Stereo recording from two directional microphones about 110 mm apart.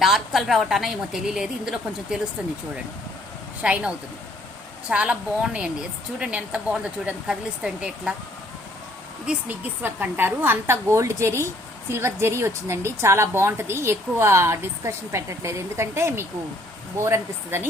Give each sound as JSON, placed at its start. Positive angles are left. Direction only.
{"t": 0.0, "sound": "a woman's voice", "side_deg": 0}
{"t": 3.6, "sound": "speech", "side_deg": -10}
{"t": 9.2, "sound": "a woman's voice", "side_deg": -10}